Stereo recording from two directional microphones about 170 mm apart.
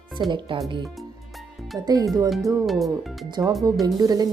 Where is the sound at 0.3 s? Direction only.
30° right (ahead or behind).